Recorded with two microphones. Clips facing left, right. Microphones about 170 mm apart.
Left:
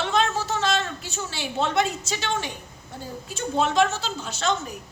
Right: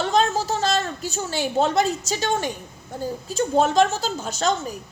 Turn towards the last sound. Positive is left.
turn(degrees=-40)  # may be behind; listen again after turning